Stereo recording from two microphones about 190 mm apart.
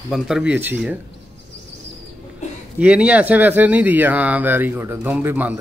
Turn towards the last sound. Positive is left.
turn(degrees=-10)  # may be behind; listen again after turning